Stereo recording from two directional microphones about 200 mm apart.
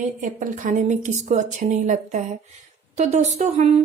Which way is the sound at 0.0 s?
40° right (ahead or behind).